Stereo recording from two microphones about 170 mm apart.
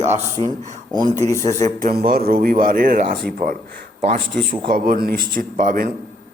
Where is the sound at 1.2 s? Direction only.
15° left (ahead or behind).